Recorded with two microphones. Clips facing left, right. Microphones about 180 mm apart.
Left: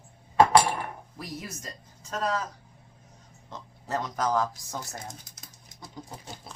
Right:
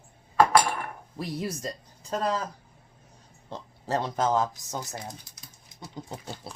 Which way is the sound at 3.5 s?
30° right (ahead or behind).